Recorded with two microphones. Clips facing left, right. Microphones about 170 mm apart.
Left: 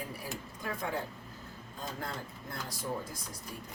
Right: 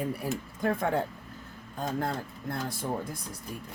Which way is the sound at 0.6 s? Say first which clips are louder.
Right 9 dB; 60° right (ahead or behind).